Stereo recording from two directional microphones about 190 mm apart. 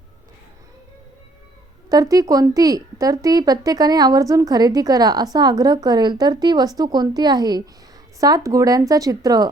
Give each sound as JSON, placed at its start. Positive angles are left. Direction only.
{"t": 1.9, "sound": "a woman's voice", "side_deg": -20}